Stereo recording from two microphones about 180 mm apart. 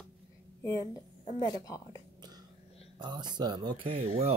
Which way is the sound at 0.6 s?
20° left (ahead or behind).